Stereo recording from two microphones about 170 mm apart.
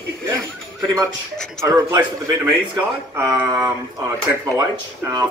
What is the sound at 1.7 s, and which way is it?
Speech, 15° right (ahead or behind).